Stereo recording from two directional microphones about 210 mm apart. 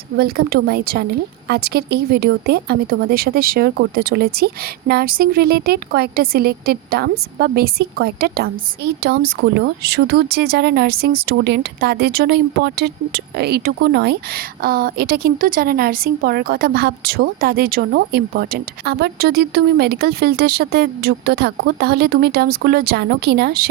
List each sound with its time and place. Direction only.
0.2 s a woman's voice: 45° right (ahead or behind)